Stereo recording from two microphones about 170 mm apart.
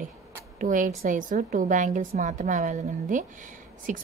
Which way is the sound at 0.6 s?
50° right (ahead or behind).